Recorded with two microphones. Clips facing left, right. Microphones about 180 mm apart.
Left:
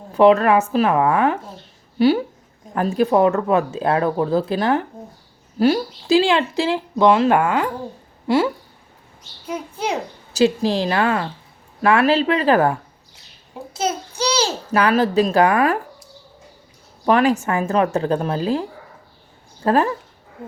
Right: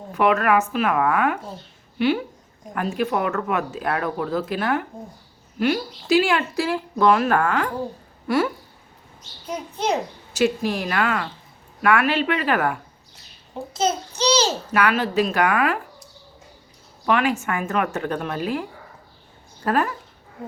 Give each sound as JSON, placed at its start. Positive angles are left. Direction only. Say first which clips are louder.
{"t": 0.1, "sound": "speech", "louder": "left 6 dB", "side_deg": 30}
{"t": 2.7, "sound": "speech", "louder": "left 7 dB", "side_deg": 35}
{"t": 9.5, "sound": "a child's voice", "louder": "left 1 dB", "side_deg": 10}
{"t": 10.3, "sound": "speech", "louder": "left 4 dB", "side_deg": 30}
{"t": 14.2, "sound": "a sound", "louder": "right 1 dB", "side_deg": 10}
{"t": 14.7, "sound": "speech", "louder": "left 4 dB", "side_deg": 35}
{"t": 17.1, "sound": "speech", "louder": "left 5 dB", "side_deg": 35}
{"t": 19.6, "sound": "speech", "louder": "left 4 dB", "side_deg": 30}